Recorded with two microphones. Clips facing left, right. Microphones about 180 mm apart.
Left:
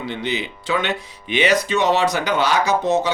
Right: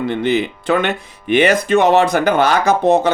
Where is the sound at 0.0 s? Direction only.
50° right (ahead or behind).